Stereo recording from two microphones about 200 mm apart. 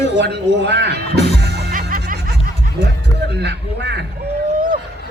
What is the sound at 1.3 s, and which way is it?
Music, 55° right (ahead or behind).